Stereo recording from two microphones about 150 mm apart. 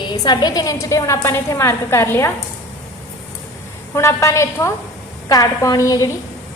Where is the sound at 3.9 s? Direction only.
20° left (ahead or behind).